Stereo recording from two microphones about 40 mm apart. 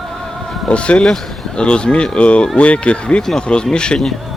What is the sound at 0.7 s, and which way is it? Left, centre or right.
Speech, left.